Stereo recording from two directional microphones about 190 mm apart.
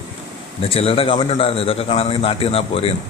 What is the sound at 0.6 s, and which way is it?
A man's voice, 30° left (ahead or behind).